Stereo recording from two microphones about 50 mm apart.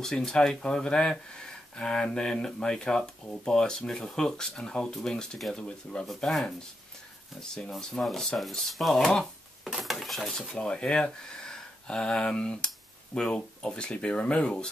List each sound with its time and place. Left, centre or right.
0.0 s speech: centre
6.0 s speech: centre
7.3 s speech: centre
9.7 s speech: centre
10.5 s speech: centre